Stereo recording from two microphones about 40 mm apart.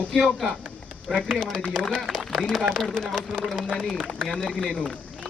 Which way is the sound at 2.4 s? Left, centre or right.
Right.